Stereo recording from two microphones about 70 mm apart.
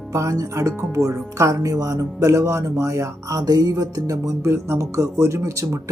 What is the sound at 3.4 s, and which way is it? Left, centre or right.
Speech, right.